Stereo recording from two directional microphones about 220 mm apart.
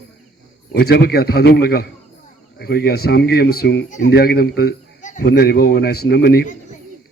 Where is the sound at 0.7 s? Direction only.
45° left (ahead or behind).